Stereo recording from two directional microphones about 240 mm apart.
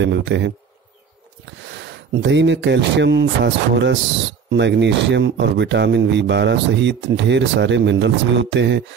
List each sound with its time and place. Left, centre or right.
0.0 s speech: right
2.2 s speech: right